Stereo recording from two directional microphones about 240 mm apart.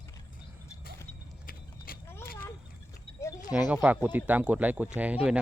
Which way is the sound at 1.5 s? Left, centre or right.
Left.